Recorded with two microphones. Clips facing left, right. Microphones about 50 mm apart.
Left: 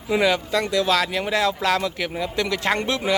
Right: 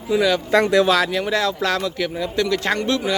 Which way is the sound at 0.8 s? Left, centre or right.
Centre.